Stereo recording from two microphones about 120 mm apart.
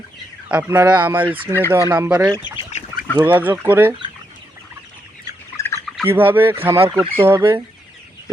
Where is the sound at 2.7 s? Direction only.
70° left (ahead or behind).